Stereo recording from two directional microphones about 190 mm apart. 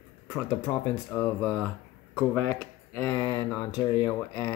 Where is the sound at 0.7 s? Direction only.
25° left (ahead or behind).